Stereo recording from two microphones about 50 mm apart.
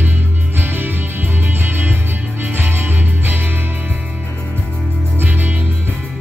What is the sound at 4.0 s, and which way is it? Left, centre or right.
Music, right.